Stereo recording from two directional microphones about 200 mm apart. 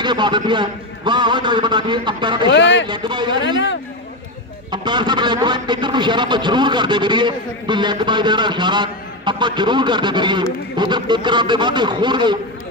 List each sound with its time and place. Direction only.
0.0 s a man's voice: 25° right (ahead or behind)
2.5 s a man's voice: 65° left (ahead or behind)
2.9 s a man's voice: 20° right (ahead or behind)
4.6 s a man's voice: 20° right (ahead or behind)